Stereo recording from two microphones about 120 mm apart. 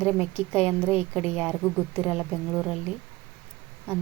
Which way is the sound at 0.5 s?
15° right (ahead or behind).